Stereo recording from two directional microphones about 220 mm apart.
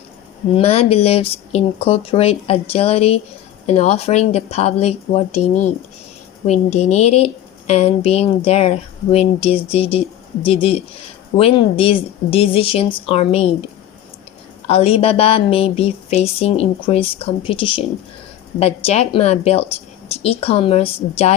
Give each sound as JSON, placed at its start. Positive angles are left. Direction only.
{"t": 0.5, "sound": "speech", "side_deg": 25}
{"t": 14.7, "sound": "speech", "side_deg": 30}